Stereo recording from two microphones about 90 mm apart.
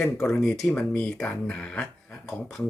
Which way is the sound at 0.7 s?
15° left (ahead or behind).